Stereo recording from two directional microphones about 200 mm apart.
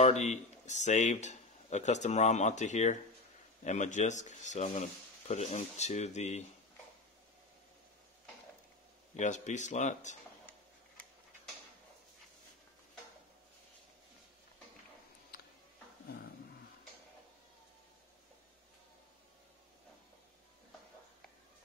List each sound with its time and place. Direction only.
0.0 s speech: 35° left (ahead or behind)
9.1 s speech: 35° left (ahead or behind)